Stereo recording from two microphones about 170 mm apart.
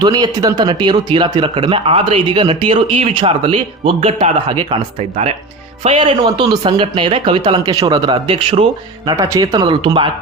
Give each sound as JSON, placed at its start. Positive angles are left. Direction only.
{"t": 0.0, "sound": "speech", "side_deg": -20}
{"t": 9.1, "sound": "speech", "side_deg": -20}